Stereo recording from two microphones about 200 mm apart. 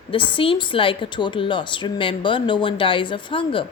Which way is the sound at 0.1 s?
25° left (ahead or behind).